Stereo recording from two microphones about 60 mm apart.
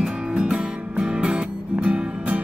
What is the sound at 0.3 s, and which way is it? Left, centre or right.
Music, centre.